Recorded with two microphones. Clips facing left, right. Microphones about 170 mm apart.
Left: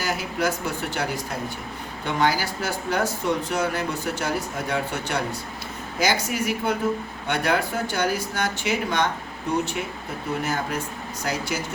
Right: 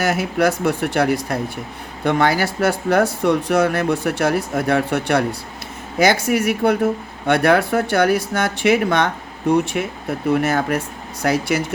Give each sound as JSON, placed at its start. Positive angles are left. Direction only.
{"t": 0.0, "sound": "speech", "side_deg": -70}
{"t": 10.4, "sound": "speech", "side_deg": -70}